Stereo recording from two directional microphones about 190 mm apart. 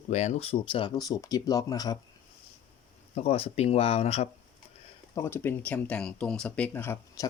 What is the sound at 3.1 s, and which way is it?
Speech, 30° left (ahead or behind).